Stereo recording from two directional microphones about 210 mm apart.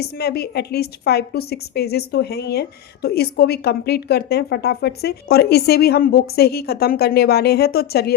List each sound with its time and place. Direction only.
0.0 s a woman's voice: 50° left (ahead or behind)